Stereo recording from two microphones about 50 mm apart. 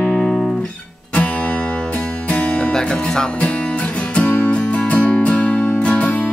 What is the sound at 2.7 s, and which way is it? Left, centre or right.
Music, centre.